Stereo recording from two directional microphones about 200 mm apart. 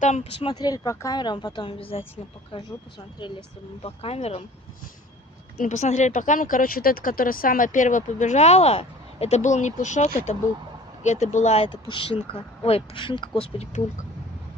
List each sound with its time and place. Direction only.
0.0 s speech: 35° left (ahead or behind)
3.8 s speech: 30° left (ahead or behind)
5.6 s speech: 35° left (ahead or behind)